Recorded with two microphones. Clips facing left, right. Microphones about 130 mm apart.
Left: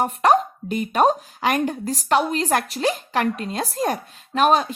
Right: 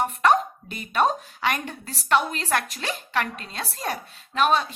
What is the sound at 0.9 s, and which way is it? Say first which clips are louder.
A woman's voice: left 3 dB; 40° left (ahead or behind).